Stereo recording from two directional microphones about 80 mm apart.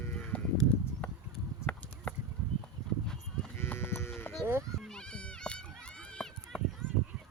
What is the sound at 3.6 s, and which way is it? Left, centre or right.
Sheep, left.